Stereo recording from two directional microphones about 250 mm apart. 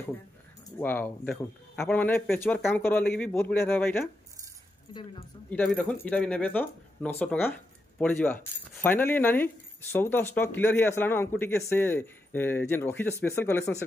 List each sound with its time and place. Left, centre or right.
0.7 s speech: centre
5.5 s speech: centre